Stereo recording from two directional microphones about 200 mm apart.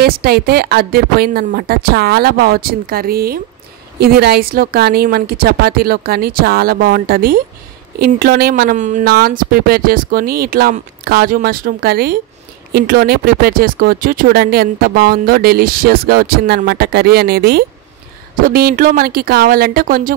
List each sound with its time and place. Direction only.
0.0 s speech: 50° right (ahead or behind)